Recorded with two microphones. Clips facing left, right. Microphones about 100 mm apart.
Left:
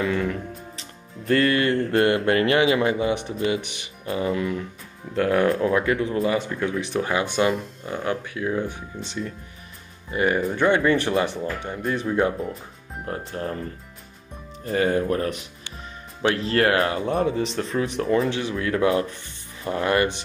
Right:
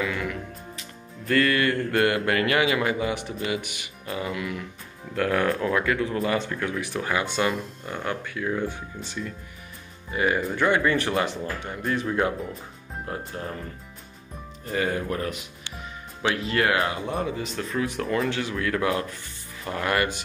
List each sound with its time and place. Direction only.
0.0 s music: 35° left (ahead or behind)
5.1 s speech: 25° left (ahead or behind)
6.2 s speech: 15° left (ahead or behind)
10.1 s speech: 35° left (ahead or behind)
10.5 s speech: 25° left (ahead or behind)
14.6 s speech: 30° left (ahead or behind)